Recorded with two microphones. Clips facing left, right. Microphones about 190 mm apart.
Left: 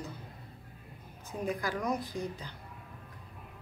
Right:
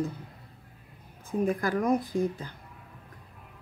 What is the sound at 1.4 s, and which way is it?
Speech, 50° right (ahead or behind).